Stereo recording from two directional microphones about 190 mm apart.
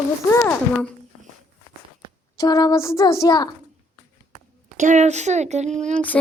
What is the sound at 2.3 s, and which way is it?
Child singing, 20° left (ahead or behind).